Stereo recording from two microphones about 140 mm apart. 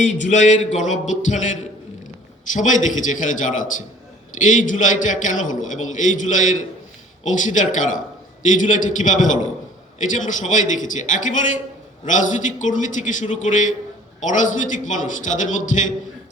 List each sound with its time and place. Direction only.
0.0 s a man's voice: 60° left (ahead or behind)